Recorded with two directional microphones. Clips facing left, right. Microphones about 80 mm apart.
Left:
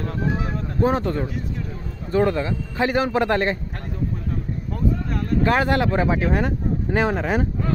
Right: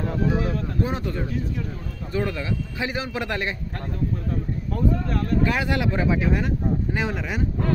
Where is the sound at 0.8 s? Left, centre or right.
Left.